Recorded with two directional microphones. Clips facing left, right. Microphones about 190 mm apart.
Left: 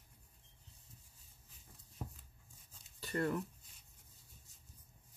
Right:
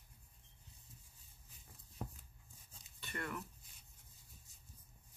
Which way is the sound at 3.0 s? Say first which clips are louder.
Left 9 dB; 35° left (ahead or behind).